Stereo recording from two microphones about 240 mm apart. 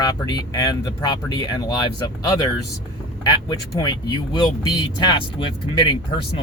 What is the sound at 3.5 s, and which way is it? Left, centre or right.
Speech, centre.